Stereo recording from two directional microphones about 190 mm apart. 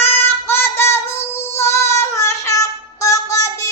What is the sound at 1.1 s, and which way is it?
Child singing, 35° left (ahead or behind).